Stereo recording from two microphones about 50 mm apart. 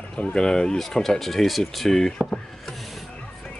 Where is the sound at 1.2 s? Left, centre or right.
Centre.